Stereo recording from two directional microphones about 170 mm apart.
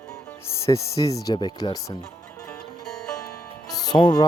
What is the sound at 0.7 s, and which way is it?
Speech, 15° left (ahead or behind).